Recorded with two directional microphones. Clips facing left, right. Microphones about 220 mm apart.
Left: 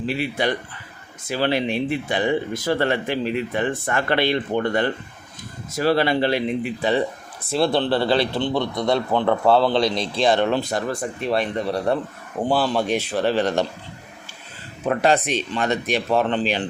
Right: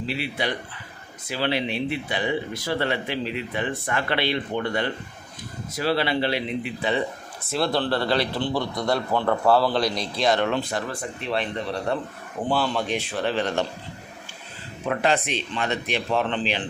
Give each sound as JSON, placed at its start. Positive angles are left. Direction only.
{"t": 0.0, "sound": "speech", "side_deg": 45}
{"t": 7.6, "sound": "a man's voice", "side_deg": 25}
{"t": 14.8, "sound": "speech", "side_deg": 40}